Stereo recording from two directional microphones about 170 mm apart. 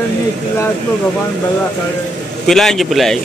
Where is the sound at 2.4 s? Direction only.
5° left (ahead or behind).